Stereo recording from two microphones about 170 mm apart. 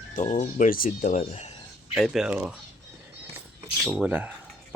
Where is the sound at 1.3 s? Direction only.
40° left (ahead or behind).